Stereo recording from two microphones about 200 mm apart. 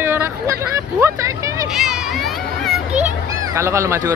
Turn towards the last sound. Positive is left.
turn(degrees=-15)  # may be behind; listen again after turning